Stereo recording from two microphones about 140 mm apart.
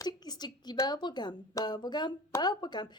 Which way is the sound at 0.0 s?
30° left (ahead or behind).